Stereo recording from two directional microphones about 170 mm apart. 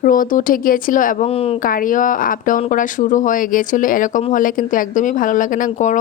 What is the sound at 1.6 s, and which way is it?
A woman's voice, 55° left (ahead or behind).